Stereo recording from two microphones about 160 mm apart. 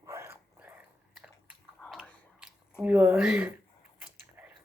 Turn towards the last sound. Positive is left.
turn(degrees=-10)  # may be behind; listen again after turning